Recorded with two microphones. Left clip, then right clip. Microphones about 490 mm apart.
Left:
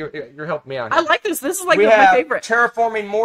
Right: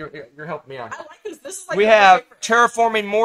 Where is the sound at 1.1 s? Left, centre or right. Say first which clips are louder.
Left 16 dB; left.